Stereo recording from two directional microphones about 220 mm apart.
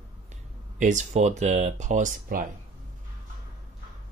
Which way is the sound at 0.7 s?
35° right (ahead or behind).